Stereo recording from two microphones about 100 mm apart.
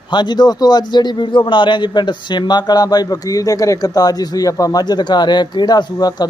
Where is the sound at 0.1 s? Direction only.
45° left (ahead or behind).